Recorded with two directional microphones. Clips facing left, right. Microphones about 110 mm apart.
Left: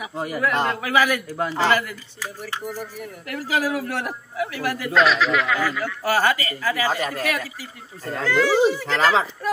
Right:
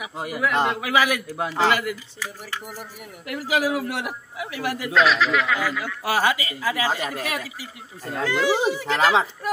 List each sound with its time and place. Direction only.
0.1 s a man's voice: 5° right (ahead or behind)
4.9 s speech: centre (ahead or behind)
6.0 s a man's voice: 15° right (ahead or behind)